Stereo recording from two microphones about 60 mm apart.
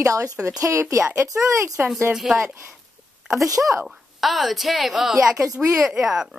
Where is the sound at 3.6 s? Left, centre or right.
Centre.